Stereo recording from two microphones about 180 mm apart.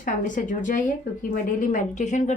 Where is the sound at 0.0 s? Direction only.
45° left (ahead or behind).